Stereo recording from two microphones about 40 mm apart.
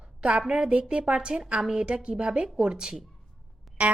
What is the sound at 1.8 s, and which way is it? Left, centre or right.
A woman's voice, right.